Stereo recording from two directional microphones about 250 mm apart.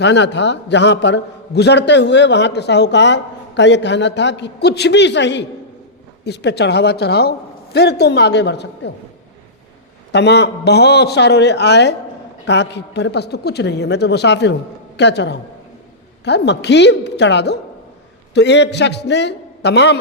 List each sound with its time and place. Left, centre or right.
0.0 s a man's voice: left
10.1 s a man's voice: left